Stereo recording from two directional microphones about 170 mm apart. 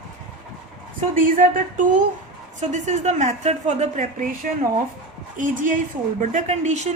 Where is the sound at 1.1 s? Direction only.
50° right (ahead or behind).